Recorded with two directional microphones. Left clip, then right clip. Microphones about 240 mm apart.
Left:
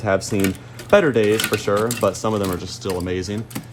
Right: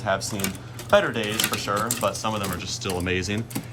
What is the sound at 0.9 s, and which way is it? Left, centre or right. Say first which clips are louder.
Speech: left 6 dB; left.